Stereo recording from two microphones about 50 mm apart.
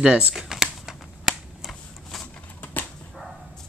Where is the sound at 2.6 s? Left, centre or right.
Left.